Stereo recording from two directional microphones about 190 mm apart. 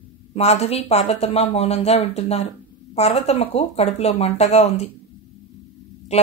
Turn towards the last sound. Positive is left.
turn(degrees=35)  # may be behind; listen again after turning